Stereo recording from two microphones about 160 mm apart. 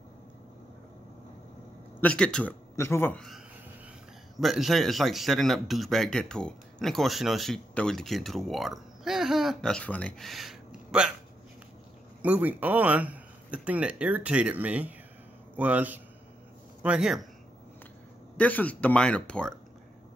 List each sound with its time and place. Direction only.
2.0 s speech: 5° left (ahead or behind)
2.7 s speech: 15° left (ahead or behind)
4.4 s speech: centre (ahead or behind)
12.2 s speech: 10° right (ahead or behind)
18.4 s speech: 10° left (ahead or behind)